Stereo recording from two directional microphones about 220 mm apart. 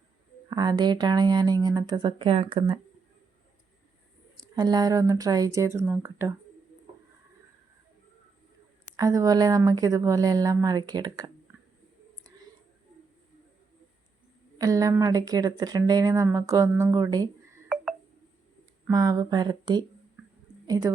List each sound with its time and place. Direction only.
0.5 s speech: 20° right (ahead or behind)
4.5 s speech: 15° right (ahead or behind)
9.0 s speech: 15° right (ahead or behind)
14.6 s speech: 15° right (ahead or behind)
18.9 s a woman's voice: 15° right (ahead or behind)